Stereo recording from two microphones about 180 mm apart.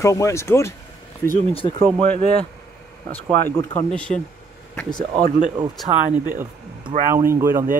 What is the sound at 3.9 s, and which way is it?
Speech, 5° left (ahead or behind).